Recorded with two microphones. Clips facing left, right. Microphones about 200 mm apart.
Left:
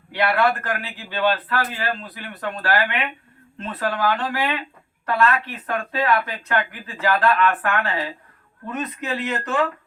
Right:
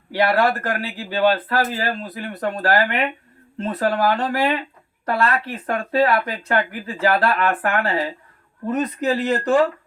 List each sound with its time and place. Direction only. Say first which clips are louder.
0.1 s a man's voice: right 2 dB; 40° right (ahead or behind)